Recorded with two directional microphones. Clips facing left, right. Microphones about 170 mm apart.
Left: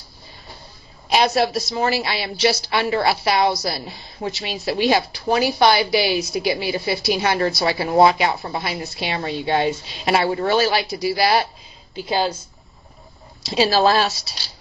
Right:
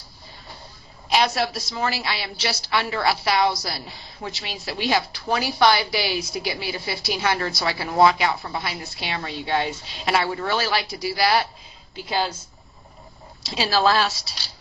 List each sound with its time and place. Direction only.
1.1 s a woman's voice: 20° left (ahead or behind)
13.5 s a woman's voice: 15° left (ahead or behind)